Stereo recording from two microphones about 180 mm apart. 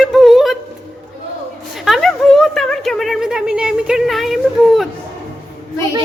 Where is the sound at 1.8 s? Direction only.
Centre (ahead or behind).